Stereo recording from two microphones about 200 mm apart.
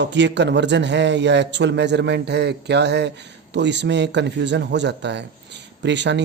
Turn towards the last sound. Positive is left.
turn(degrees=-60)  # may be behind; listen again after turning